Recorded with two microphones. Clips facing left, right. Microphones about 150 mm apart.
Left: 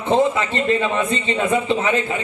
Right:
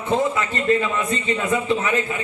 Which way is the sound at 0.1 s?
25° left (ahead or behind).